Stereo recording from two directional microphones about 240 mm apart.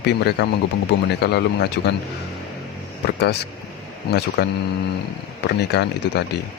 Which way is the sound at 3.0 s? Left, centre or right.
Left.